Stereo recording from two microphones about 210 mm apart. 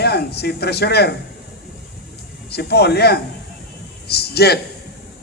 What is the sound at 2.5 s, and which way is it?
A man's voice, 50° left (ahead or behind).